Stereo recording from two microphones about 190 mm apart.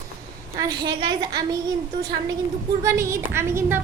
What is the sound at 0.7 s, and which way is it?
Speech, 25° right (ahead or behind).